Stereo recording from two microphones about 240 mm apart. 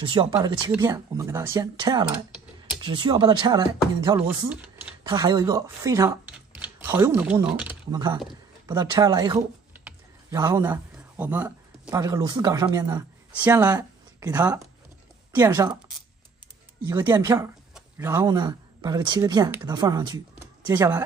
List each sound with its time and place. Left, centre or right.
0.0 s speech: right
4.6 s speech: centre
5.0 s speech: centre
16.9 s speech: centre